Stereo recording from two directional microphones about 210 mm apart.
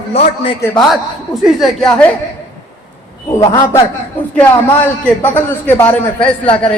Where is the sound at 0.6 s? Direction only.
15° left (ahead or behind).